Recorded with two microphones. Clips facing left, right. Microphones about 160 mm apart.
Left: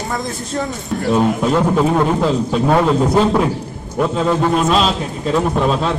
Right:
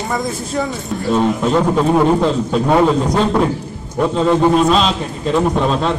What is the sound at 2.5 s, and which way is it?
A man's voice, 5° left (ahead or behind).